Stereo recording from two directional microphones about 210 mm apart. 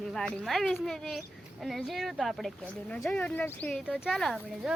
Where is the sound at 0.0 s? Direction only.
Centre (ahead or behind).